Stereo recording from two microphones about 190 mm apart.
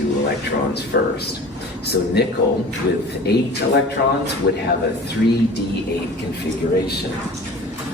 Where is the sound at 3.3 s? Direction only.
60° left (ahead or behind).